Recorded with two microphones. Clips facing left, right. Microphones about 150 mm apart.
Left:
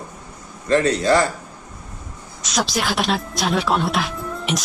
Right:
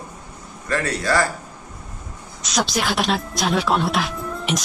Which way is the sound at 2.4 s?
Centre (ahead or behind).